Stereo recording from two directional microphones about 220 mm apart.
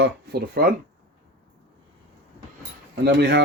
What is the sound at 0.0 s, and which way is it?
Speech, 45° right (ahead or behind).